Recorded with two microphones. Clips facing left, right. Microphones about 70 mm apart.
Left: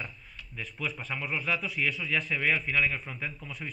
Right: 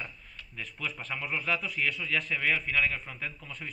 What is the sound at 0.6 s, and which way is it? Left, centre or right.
A man's voice, centre.